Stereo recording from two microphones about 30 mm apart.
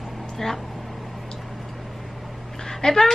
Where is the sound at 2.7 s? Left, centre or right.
Centre.